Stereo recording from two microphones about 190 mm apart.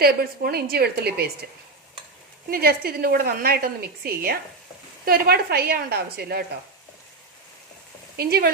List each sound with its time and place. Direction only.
0.0 s a woman's voice: 55° right (ahead or behind)
2.5 s a woman's voice: 50° right (ahead or behind)
8.1 s speech: 55° right (ahead or behind)